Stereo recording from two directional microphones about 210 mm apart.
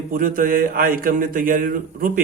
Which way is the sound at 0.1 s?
40° right (ahead or behind).